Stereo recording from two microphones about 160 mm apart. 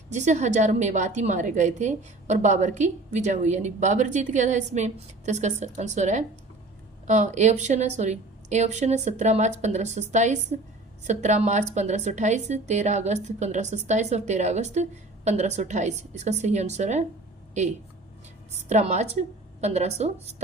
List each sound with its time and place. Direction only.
0.1 s a woman's voice: 45° right (ahead or behind)